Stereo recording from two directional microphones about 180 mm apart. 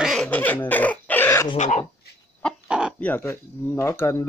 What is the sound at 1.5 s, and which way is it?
Speech, 40° left (ahead or behind).